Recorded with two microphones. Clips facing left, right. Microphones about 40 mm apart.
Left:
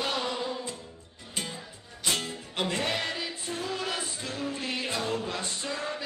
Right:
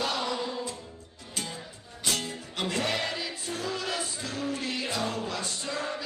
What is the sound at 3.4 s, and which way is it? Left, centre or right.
Music, left.